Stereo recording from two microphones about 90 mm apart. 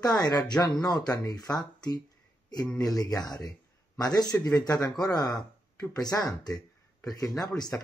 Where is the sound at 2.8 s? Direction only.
45° left (ahead or behind).